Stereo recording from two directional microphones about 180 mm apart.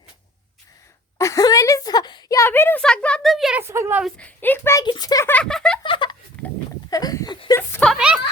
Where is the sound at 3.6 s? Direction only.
15° right (ahead or behind).